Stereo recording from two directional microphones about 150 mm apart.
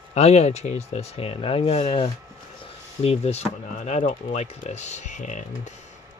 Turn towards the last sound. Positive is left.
turn(degrees=55)  # may be behind; listen again after turning